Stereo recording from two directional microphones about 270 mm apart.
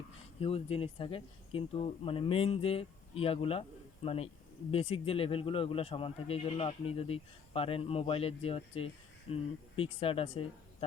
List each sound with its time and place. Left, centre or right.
0.3 s speech: left